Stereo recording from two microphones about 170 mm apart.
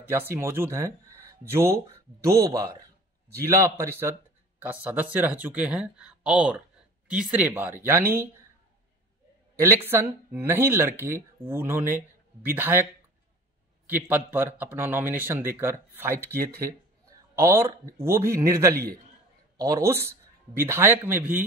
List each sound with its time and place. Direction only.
0.1 s speech: 15° right (ahead or behind)
9.8 s speech: 15° right (ahead or behind)
13.8 s speech: 10° right (ahead or behind)